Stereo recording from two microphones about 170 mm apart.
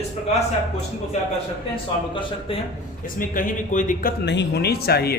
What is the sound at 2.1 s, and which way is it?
Speech, 30° left (ahead or behind).